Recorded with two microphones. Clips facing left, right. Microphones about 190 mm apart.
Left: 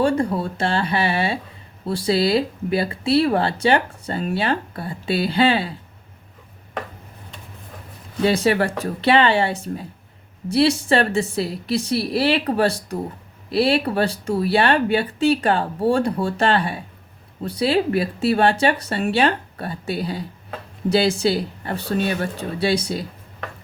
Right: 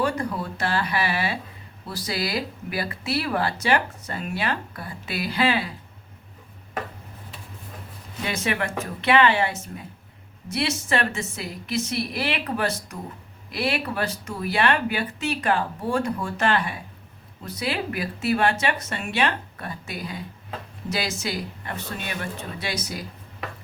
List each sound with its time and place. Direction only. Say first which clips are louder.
0.0 s speech: left 6 dB; 30° left (ahead or behind)
8.2 s speech: left 9 dB; 35° left (ahead or behind)